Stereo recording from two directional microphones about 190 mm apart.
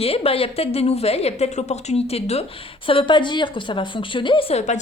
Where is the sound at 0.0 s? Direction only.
30° left (ahead or behind).